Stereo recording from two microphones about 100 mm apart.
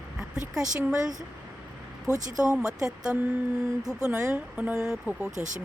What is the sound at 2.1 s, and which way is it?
Speech, 25° left (ahead or behind).